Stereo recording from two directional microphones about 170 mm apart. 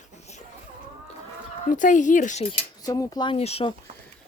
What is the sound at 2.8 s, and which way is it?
Speech, 20° left (ahead or behind).